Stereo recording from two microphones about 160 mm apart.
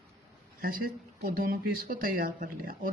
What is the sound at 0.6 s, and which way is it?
Speech, 65° right (ahead or behind).